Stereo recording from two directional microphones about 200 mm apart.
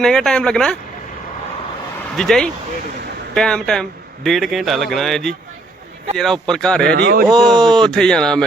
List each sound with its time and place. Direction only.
0.0 s a man's voice: centre (ahead or behind)
2.1 s a man's voice: 5° left (ahead or behind)
6.8 s speech: 55° right (ahead or behind)
7.3 s a man's voice: centre (ahead or behind)